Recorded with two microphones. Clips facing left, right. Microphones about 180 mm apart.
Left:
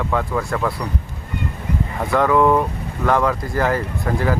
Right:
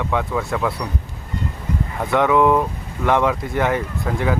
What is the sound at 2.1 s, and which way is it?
Speech, 5° right (ahead or behind).